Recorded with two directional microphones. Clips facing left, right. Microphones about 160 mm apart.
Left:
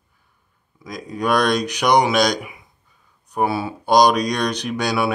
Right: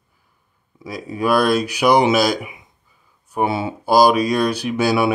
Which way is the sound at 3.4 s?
20° right (ahead or behind).